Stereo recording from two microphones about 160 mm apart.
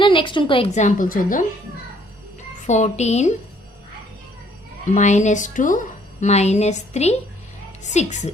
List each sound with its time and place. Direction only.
0.0 s a woman's voice: 30° left (ahead or behind)
0.7 s a woman's voice: 50° left (ahead or behind)
2.6 s speech: 45° left (ahead or behind)
4.9 s speech: 45° left (ahead or behind)